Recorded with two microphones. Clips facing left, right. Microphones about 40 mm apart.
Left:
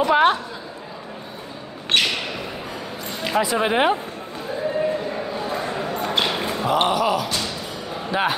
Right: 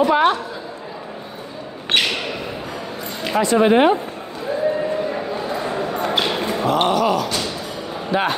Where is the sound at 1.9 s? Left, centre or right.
Right.